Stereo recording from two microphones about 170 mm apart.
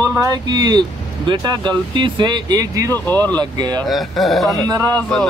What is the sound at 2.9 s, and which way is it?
Speech, 10° left (ahead or behind).